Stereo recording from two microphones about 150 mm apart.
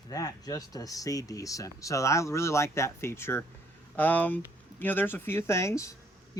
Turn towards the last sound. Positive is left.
turn(degrees=20)  # may be behind; listen again after turning